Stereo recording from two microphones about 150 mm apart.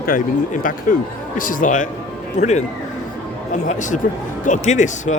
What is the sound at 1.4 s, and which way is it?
Speech, 60° left (ahead or behind).